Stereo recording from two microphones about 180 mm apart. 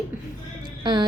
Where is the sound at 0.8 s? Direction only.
25° right (ahead or behind).